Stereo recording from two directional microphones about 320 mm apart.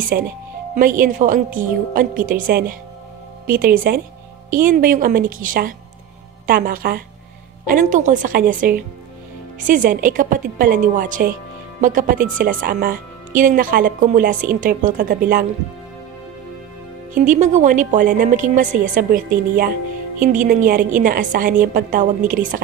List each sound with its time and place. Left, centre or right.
0.1 s a woman's voice: right
17.1 s a woman's voice: right